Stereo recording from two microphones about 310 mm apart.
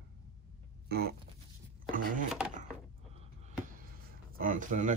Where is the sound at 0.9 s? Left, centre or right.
Right.